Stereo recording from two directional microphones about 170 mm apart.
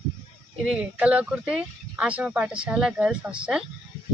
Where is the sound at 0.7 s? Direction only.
5° right (ahead or behind).